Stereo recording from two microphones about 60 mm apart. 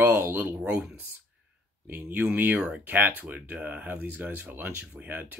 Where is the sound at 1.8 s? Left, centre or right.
Right.